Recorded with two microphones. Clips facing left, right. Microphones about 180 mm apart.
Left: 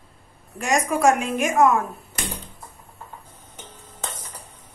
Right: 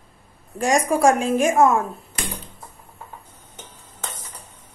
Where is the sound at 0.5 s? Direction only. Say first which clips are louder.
Right 3 dB; 35° right (ahead or behind).